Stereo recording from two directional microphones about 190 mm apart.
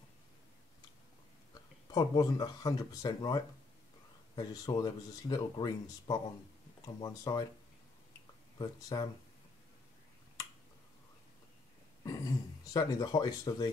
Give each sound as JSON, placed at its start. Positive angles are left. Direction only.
{"t": 1.5, "sound": "speech", "side_deg": 20}
{"t": 8.5, "sound": "speech", "side_deg": 25}
{"t": 12.0, "sound": "a sound", "side_deg": 20}